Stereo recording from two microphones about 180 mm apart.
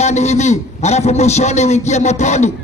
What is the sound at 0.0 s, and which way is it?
A man's voice, 40° left (ahead or behind).